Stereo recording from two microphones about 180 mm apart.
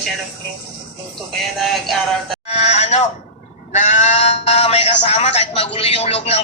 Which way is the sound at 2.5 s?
35° left (ahead or behind).